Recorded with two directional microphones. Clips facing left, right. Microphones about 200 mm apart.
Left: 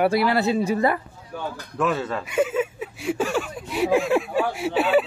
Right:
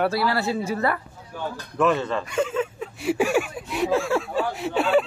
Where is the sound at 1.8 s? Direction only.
5° left (ahead or behind).